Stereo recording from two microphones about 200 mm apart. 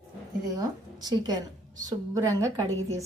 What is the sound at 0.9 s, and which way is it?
A woman's voice, 20° right (ahead or behind).